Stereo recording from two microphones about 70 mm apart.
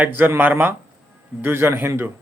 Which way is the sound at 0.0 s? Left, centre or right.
Right.